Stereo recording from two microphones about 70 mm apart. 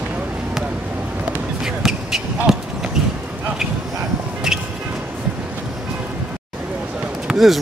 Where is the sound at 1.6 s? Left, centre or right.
Centre.